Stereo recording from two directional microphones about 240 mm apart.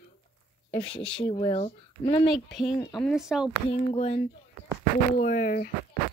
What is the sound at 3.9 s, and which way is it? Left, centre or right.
Speech, left.